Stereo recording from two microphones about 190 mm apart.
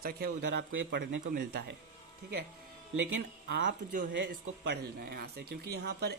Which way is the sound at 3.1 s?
65° right (ahead or behind).